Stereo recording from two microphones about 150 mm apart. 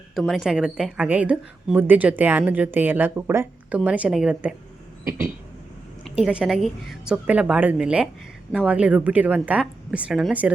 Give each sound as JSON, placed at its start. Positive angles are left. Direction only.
{"t": 0.2, "sound": "a woman's voice", "side_deg": 0}